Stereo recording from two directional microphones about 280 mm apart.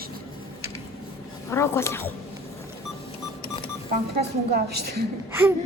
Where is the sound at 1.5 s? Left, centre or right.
Centre.